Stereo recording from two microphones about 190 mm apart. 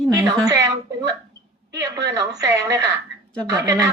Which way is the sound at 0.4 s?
15° right (ahead or behind).